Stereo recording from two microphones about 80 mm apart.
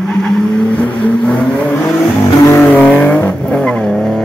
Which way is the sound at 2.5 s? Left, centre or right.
Left.